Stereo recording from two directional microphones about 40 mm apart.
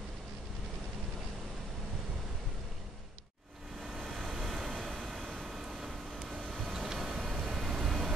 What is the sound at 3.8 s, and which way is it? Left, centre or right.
Vehicle, centre.